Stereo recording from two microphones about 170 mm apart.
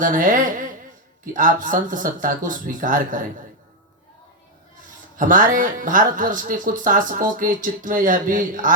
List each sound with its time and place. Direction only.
0.0 s speech: 50° right (ahead or behind)
5.1 s speech: 50° right (ahead or behind)